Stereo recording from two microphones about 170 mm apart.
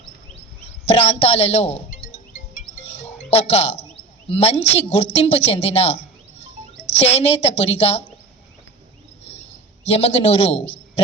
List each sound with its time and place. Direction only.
0.9 s a man's voice: 35° left (ahead or behind)
2.6 s music: 35° left (ahead or behind)
4.4 s a woman's voice: 35° left (ahead or behind)
9.2 s a sound: 35° left (ahead or behind)